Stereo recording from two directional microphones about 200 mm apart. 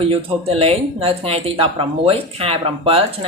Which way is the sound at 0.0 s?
30° right (ahead or behind).